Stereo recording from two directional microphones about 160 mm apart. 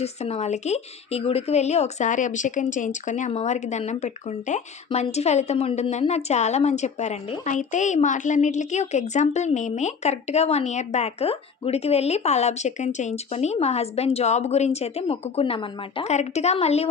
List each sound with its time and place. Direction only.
0.0 s speech: 40° left (ahead or behind)
16.1 s speech: 45° left (ahead or behind)